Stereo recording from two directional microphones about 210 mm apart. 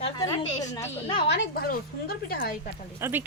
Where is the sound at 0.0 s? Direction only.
20° left (ahead or behind).